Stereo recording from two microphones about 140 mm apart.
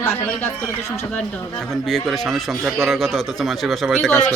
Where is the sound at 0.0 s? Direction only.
15° left (ahead or behind).